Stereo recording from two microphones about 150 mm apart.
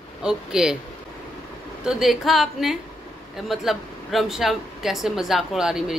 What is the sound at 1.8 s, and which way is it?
Speech, centre (ahead or behind).